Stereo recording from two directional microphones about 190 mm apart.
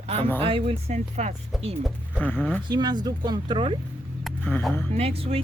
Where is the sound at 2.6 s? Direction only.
20° right (ahead or behind).